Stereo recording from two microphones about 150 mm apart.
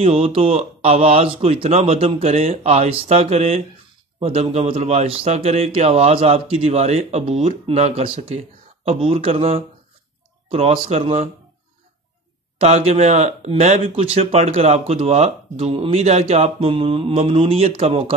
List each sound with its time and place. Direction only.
0.0 s speech: 45° right (ahead or behind)
12.5 s speech: 40° right (ahead or behind)